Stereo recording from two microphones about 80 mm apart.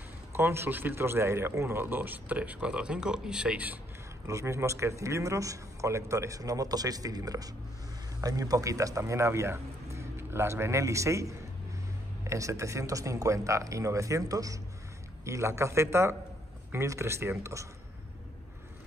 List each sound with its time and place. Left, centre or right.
0.3 s a man's voice: right
4.3 s speech: right
15.2 s speech: right